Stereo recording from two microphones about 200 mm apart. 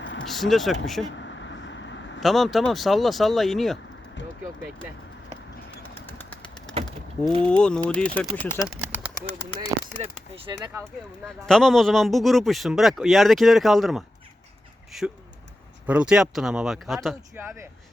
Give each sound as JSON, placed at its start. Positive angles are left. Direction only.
{"t": 0.0, "sound": "vehicle", "side_deg": 70}
{"t": 0.3, "sound": "a man's voice", "side_deg": 0}
{"t": 1.2, "sound": "vehicle", "side_deg": 65}
{"t": 2.2, "sound": "a man's voice", "side_deg": 0}
{"t": 6.1, "sound": "bird", "side_deg": 10}
{"t": 7.4, "sound": "a man's voice", "side_deg": 5}
{"t": 8.7, "sound": "bird", "side_deg": -10}
{"t": 10.5, "sound": "speech", "side_deg": -15}
{"t": 11.3, "sound": "a man's voice", "side_deg": 5}
{"t": 17.3, "sound": "speech", "side_deg": -10}